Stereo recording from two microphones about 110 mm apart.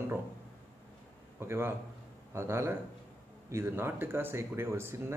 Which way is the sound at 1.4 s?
20° right (ahead or behind).